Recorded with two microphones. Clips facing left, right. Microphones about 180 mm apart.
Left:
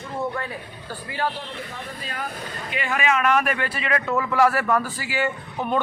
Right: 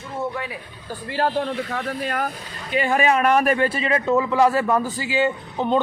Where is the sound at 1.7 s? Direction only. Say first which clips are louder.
Right 9 dB; 60° right (ahead or behind).